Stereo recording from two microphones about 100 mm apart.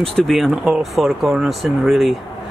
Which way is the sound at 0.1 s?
Centre (ahead or behind).